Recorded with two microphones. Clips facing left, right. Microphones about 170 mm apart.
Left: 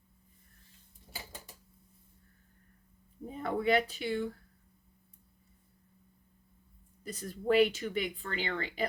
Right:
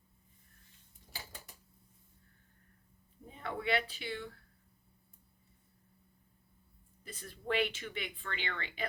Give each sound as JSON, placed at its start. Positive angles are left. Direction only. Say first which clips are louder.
{"t": 3.2, "sound": "speech", "louder": "left 6 dB", "side_deg": 45}
{"t": 7.0, "sound": "speech", "louder": "left 9 dB", "side_deg": 40}